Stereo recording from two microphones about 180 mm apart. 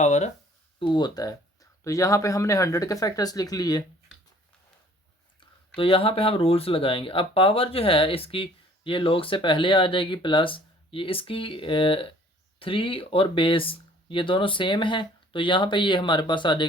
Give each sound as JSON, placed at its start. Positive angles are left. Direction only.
{"t": 0.0, "sound": "speech", "side_deg": 40}
{"t": 0.8, "sound": "speech", "side_deg": 25}
{"t": 5.4, "sound": "speech", "side_deg": 30}